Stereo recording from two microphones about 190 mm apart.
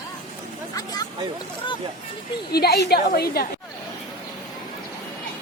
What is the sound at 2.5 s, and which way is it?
Speech, 55° left (ahead or behind).